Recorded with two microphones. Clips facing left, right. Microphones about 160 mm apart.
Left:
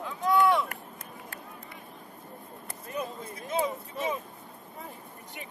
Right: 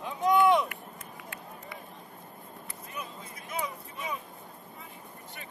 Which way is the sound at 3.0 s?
25° left (ahead or behind).